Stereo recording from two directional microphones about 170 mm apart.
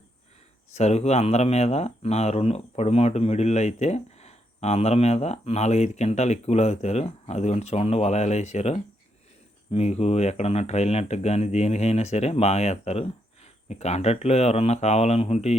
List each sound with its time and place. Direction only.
0.7 s speech: 40° left (ahead or behind)